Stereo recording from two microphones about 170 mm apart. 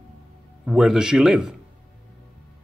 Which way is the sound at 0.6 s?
5° right (ahead or behind).